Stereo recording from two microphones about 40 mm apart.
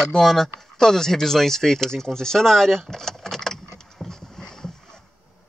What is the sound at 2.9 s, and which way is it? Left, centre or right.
Vehicle, centre.